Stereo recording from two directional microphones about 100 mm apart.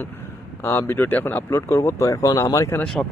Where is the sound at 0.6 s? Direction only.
25° left (ahead or behind).